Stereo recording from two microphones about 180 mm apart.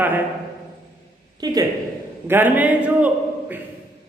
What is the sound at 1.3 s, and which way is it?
Speech, 20° right (ahead or behind).